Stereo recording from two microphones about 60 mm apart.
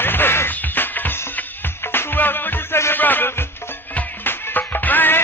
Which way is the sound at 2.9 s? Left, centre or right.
Left.